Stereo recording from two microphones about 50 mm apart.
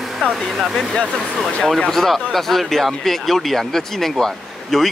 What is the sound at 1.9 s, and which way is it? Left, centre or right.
Speech, centre.